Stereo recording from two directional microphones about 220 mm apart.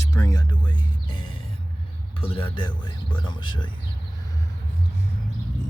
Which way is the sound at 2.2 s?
25° left (ahead or behind).